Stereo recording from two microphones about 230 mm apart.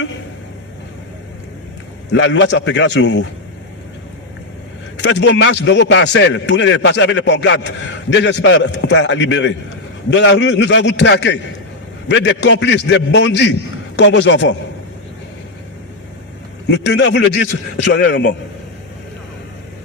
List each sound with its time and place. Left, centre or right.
2.0 s a man's voice: left
4.9 s a man's voice: left
16.6 s a man's voice: left